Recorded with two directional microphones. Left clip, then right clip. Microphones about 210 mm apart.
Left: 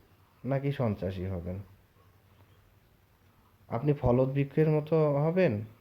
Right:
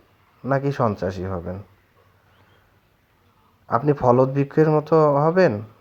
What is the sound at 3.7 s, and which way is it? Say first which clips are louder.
Speech: right 11 dB; 20° right (ahead or behind).